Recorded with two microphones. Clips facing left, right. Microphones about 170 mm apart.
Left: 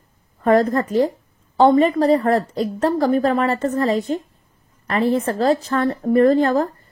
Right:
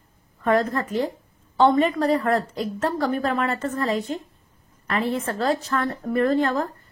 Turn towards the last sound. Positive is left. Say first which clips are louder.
# left 6 dB
turn(degrees=40)  # may be behind; listen again after turning